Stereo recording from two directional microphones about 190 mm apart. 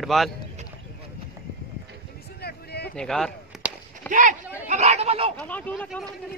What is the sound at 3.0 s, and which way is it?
Chop, 5° left (ahead or behind).